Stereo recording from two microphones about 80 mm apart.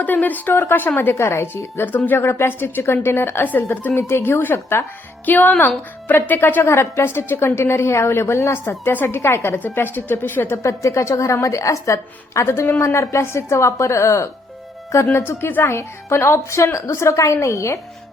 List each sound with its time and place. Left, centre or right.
0.0 s a woman's voice: left
8.8 s a woman's voice: left
9.0 s a woman's voice: left
10.6 s speech: left